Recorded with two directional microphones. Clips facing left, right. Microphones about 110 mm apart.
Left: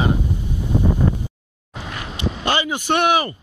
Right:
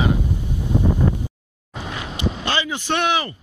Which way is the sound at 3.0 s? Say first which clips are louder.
Left 4 dB; 50° left (ahead or behind).